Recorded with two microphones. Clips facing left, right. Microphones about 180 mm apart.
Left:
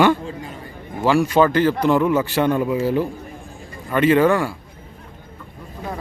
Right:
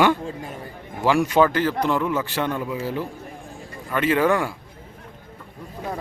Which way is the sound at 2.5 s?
20° left (ahead or behind).